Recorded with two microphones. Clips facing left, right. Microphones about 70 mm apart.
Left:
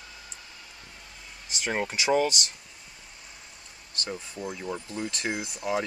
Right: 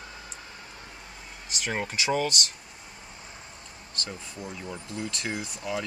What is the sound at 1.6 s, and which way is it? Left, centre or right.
Speech, centre.